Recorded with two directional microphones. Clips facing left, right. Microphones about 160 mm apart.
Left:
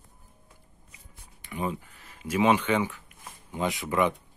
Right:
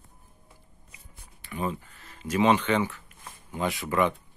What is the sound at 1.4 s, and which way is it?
Speech, 15° left (ahead or behind).